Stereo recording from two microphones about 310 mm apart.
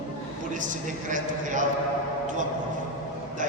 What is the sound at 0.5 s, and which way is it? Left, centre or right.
A man's voice, right.